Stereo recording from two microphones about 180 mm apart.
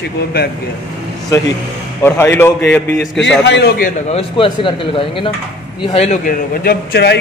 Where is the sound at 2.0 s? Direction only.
15° left (ahead or behind).